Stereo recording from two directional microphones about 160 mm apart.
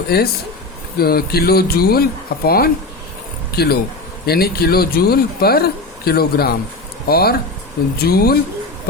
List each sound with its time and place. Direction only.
0.1 s speech: 80° left